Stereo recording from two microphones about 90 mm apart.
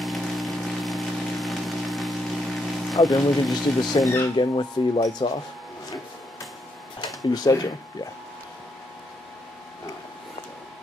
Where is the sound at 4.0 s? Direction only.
55° left (ahead or behind).